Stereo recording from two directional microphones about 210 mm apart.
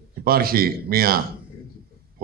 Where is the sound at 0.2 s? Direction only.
45° right (ahead or behind).